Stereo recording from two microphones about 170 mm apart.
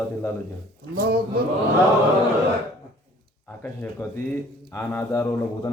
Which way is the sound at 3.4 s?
10° left (ahead or behind).